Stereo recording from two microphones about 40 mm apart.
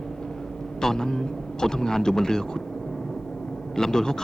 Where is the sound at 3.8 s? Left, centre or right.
Centre.